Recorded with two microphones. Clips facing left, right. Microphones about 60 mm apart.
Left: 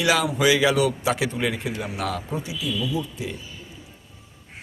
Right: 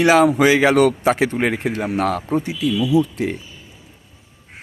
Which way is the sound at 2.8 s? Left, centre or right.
Right.